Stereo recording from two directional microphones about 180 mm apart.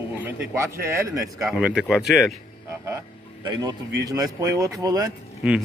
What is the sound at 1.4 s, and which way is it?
Speech, 5° right (ahead or behind).